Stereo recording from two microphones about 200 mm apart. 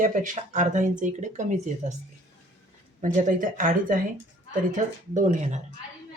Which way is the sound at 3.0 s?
40° right (ahead or behind).